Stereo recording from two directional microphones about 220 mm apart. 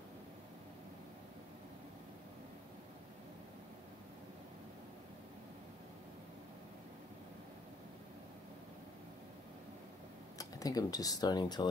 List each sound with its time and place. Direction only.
10.3 s speech: 15° left (ahead or behind)